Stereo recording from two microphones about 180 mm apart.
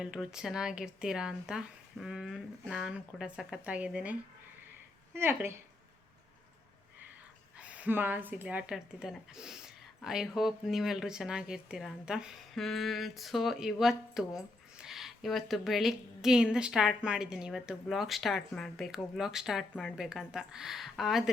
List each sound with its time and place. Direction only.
0.0 s speech: 5° right (ahead or behind)
7.6 s speech: 5° right (ahead or behind)